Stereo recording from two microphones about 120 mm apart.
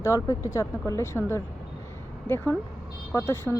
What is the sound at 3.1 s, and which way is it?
Speech, 25° left (ahead or behind).